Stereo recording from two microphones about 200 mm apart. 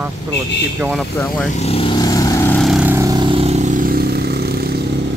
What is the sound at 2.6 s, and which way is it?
Vehicle, 5° right (ahead or behind).